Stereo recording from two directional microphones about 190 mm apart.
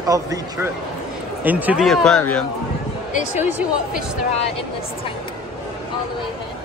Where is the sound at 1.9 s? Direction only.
5° left (ahead or behind).